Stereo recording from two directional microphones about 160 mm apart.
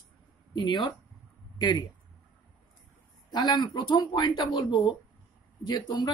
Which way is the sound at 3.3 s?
30° left (ahead or behind).